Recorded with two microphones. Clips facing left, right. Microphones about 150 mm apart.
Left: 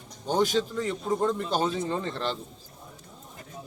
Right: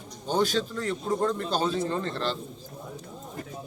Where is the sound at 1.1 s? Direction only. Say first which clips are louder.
Even; 5° left (ahead or behind).